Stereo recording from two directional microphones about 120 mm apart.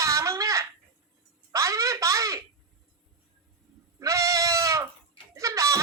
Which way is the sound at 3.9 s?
25° right (ahead or behind).